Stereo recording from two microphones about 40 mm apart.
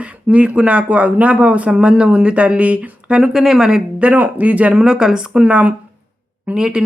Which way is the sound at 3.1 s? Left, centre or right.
Centre.